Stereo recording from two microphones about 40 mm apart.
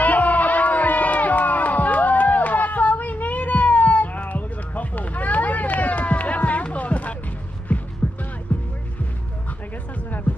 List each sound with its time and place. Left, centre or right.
0.0 s crowd: left
7.7 s hum: left
8.5 s music: left